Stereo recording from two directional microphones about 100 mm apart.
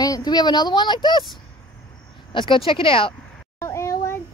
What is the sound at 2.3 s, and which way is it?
Speech, 55° left (ahead or behind).